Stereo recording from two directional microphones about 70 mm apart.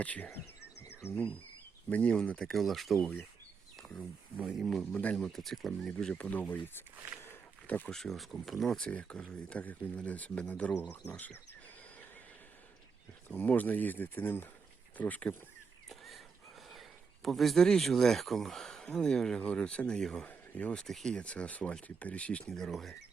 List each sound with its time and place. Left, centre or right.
0.0 s speech: centre
2.5 s speech: centre
4.4 s speech: centre
4.9 s speech: left
5.2 s speech: centre
6.1 s speech: left
7.3 s a sound: left
7.9 s speech: centre
8.8 s speech: centre
13.2 s speech: left
15.9 s a sound: centre
17.2 s speech: centre
20.2 s speech: left
20.8 s speech: centre